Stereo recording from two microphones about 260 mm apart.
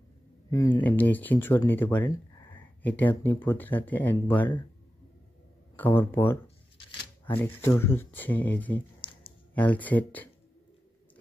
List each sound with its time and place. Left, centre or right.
0.5 s speech: centre
5.8 s speech: centre
9.0 s a sound: centre
9.5 s speech: centre